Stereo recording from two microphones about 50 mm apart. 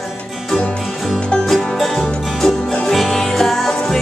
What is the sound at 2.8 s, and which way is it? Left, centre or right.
Music, centre.